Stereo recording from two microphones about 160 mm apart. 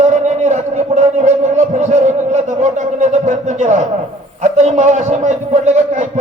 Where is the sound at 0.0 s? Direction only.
45° right (ahead or behind).